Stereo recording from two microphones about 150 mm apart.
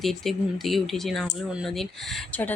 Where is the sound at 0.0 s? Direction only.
Centre (ahead or behind).